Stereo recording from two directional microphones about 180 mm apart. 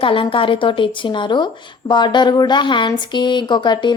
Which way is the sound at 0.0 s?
30° left (ahead or behind).